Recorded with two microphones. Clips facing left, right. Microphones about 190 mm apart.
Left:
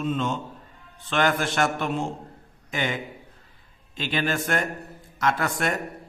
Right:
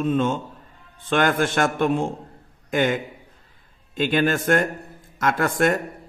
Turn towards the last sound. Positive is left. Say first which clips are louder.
# right 5 dB
turn(degrees=-50)  # may be behind; listen again after turning